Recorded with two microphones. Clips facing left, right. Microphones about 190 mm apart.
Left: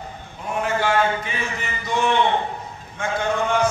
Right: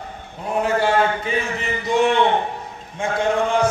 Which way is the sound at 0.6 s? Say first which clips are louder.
Right 3 dB; 35° right (ahead or behind).